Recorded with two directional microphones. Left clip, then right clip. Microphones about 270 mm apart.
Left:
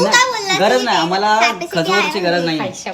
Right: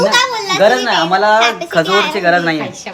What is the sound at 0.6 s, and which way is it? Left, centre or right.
A woman's voice, centre.